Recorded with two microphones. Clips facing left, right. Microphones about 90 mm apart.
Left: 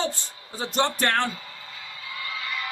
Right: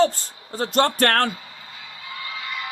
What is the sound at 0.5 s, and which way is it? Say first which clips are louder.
Speech: right 5 dB; 55° right (ahead or behind).